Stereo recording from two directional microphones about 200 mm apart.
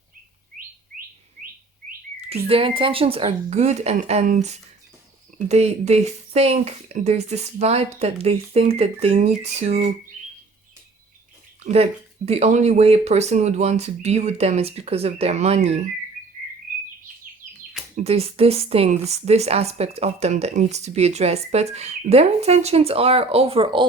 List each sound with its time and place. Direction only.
2.3 s speech: 30° right (ahead or behind)
11.6 s speech: 30° right (ahead or behind)
17.9 s speech: 30° right (ahead or behind)